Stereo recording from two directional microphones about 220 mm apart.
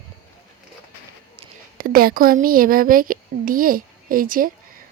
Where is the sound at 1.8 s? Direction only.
40° right (ahead or behind).